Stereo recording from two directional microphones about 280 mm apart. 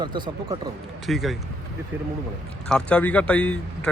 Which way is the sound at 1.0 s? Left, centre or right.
Centre.